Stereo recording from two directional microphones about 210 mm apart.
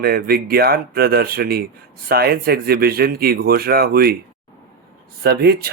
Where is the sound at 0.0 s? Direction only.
45° right (ahead or behind).